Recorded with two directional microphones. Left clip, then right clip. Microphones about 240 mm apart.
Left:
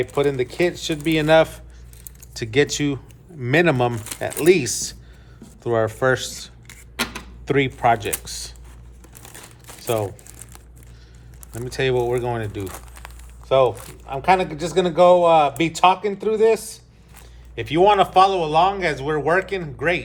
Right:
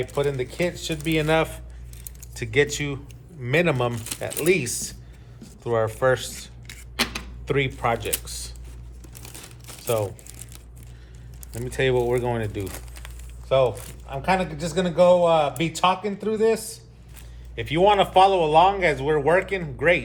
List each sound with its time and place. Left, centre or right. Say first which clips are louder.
0.1 s speech: left 4 dB; left
7.1 s a sound: left 4 dB; left
7.8 s speech: left 6 dB; centre
9.2 s crumpling: left 1 dB; centre
11.5 s speech: left 1 dB; centre
13.5 s speech: left 3 dB; left; by 20.1 s centre